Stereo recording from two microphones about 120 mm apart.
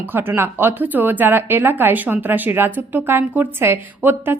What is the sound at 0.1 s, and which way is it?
A woman's voice, 15° right (ahead or behind).